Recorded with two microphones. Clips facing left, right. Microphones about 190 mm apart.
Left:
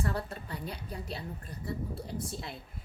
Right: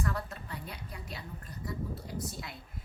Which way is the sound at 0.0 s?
30° left (ahead or behind).